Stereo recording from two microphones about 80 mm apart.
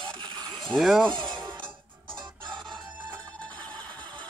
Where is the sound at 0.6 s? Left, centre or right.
Centre.